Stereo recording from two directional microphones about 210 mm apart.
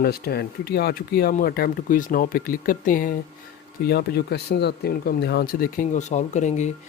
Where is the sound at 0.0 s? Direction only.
50° left (ahead or behind).